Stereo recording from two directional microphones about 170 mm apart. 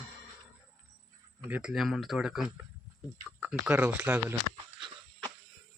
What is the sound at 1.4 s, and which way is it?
Speech, 10° right (ahead or behind).